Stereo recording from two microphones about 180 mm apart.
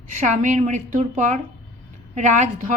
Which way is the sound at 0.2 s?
40° right (ahead or behind).